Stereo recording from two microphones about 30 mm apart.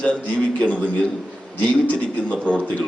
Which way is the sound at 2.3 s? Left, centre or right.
Left.